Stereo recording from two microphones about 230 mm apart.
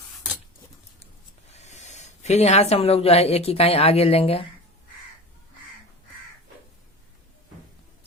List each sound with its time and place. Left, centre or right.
1.5 s speech: left